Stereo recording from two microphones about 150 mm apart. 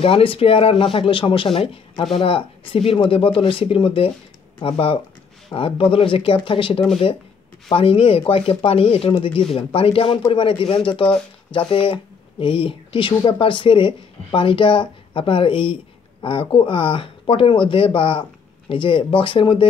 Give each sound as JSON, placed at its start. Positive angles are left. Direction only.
{"t": 0.0, "sound": "speech", "side_deg": 40}